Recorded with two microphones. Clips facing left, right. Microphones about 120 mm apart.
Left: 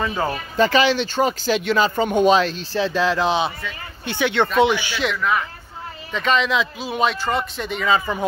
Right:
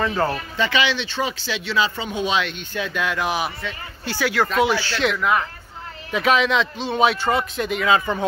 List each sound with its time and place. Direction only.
0.0 s speech: 10° left (ahead or behind)
0.6 s speech: 40° left (ahead or behind); by 5.0 s 15° left (ahead or behind)
5.0 s a man's voice: 5° right (ahead or behind)